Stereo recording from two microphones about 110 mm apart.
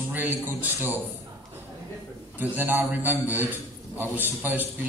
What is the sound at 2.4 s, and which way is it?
A man's voice, 20° right (ahead or behind).